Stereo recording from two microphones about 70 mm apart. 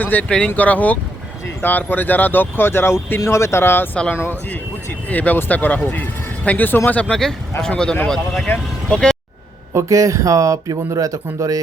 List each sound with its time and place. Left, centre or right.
0.0 s speech: left
7.1 s speech: centre
9.7 s speech: right